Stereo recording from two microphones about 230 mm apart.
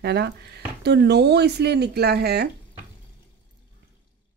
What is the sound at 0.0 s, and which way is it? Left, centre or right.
Speech, right.